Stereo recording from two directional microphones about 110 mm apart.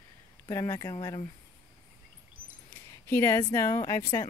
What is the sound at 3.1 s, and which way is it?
Speech, 20° left (ahead or behind).